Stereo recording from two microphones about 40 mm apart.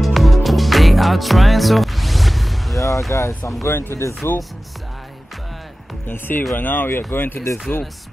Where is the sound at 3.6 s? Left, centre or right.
Left.